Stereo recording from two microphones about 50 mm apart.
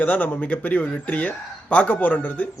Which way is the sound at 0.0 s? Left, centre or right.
Left.